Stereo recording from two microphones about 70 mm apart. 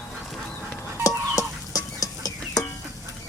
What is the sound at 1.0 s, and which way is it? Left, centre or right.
Chicken, left.